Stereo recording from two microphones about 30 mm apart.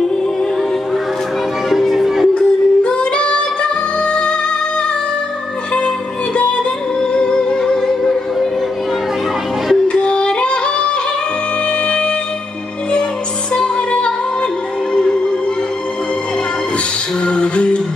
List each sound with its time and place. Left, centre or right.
1.7 s music: centre
2.3 s female singing: left
4.0 s music: left
7.0 s music: left; by 8.5 s centre
9.8 s music: left
13.7 s music: left
17.2 s music: left